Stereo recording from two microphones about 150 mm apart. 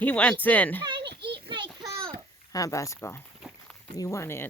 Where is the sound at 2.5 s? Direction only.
20° left (ahead or behind).